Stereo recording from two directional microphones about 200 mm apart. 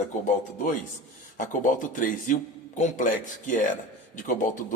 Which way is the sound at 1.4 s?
40° left (ahead or behind).